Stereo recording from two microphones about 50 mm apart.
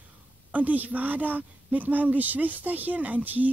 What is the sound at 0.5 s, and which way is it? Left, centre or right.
Speech, right.